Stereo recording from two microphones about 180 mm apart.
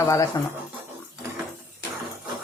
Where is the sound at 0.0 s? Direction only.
15° left (ahead or behind).